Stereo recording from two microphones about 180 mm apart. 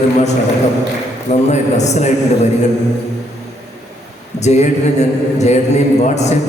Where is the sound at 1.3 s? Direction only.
40° left (ahead or behind).